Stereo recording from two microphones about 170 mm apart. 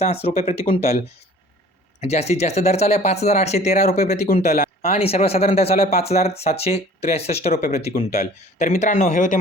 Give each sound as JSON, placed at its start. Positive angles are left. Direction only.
{"t": 0.0, "sound": "speech", "side_deg": 35}
{"t": 4.9, "sound": "speech", "side_deg": 35}